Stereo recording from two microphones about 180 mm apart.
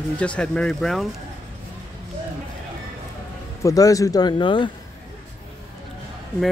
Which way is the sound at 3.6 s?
20° left (ahead or behind).